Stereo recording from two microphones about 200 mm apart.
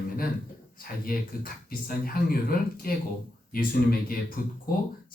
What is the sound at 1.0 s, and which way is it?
A man's voice, 45° left (ahead or behind).